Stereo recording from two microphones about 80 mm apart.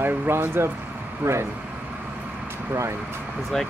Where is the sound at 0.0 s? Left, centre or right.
Right.